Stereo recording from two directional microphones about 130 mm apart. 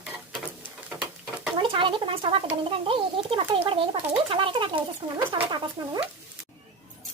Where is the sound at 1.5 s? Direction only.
40° right (ahead or behind).